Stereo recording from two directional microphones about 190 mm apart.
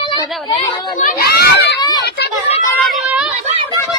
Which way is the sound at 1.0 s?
50° left (ahead or behind).